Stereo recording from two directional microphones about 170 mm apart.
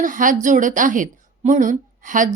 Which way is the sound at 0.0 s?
50° right (ahead or behind).